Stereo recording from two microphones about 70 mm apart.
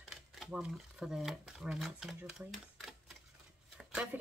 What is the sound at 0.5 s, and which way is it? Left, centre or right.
Speech, centre.